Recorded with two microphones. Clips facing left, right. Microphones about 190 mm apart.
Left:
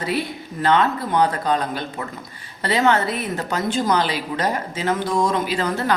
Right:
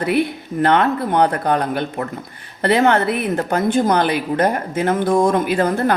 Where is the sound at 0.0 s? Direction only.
60° right (ahead or behind).